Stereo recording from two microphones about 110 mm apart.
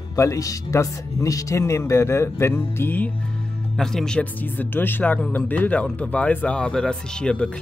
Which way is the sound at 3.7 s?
5° left (ahead or behind).